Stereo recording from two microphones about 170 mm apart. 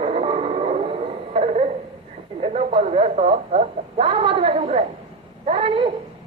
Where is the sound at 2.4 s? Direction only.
35° right (ahead or behind).